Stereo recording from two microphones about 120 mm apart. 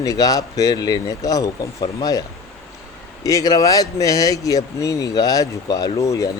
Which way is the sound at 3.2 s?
30° left (ahead or behind).